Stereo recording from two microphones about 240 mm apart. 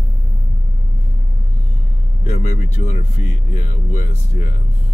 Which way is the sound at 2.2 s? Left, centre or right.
Left.